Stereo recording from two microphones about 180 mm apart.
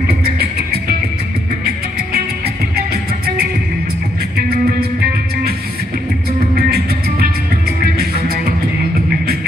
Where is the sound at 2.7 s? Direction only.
60° right (ahead or behind).